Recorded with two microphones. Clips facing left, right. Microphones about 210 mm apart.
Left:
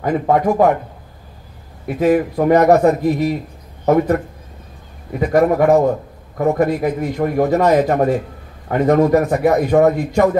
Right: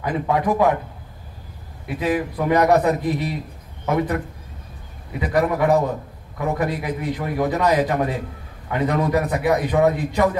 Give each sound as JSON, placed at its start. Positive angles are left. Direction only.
{"t": 0.0, "sound": "a man's voice", "side_deg": 45}
{"t": 1.9, "sound": "a man's voice", "side_deg": 50}
{"t": 2.8, "sound": "a man's voice", "side_deg": 45}
{"t": 5.2, "sound": "a man's voice", "side_deg": 45}
{"t": 9.7, "sound": "a man's voice", "side_deg": 50}